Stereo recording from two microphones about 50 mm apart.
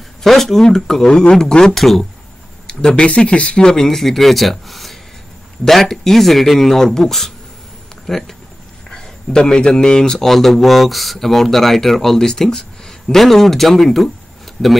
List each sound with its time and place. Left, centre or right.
0.2 s speech: centre
2.6 s speech: centre
3.8 s a man's voice: centre